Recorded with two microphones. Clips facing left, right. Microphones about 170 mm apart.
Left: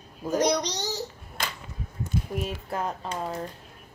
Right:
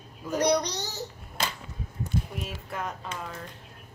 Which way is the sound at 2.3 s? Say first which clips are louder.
Left 5 dB; 40° left (ahead or behind).